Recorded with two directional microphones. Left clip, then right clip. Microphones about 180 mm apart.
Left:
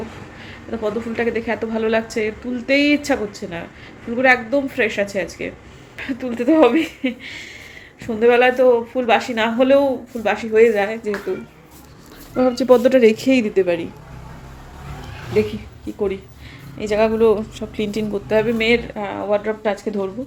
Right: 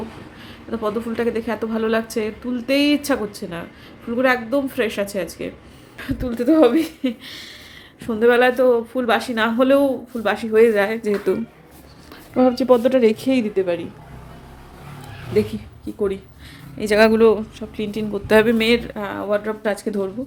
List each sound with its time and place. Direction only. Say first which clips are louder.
0.4 s a woman's voice: left 1 dB; 20° right (ahead or behind); by 11.0 s 40° right (ahead or behind)
12.4 s speech: right 1 dB; 15° right (ahead or behind)
12.6 s speech: left 5 dB; centre (ahead or behind)
16.9 s speech: right 3 dB; 55° right (ahead or behind)
17.3 s speech: left 2 dB; 5° left (ahead or behind)
18.3 s speech: right 4 dB; 55° right (ahead or behind)
18.5 s a woman's voice: left 1 dB; 30° right (ahead or behind)
18.9 s speech: left 2 dB; 15° right (ahead or behind)